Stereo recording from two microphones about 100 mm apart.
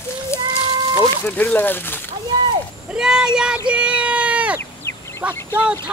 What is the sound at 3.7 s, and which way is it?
Sheep, 10° right (ahead or behind).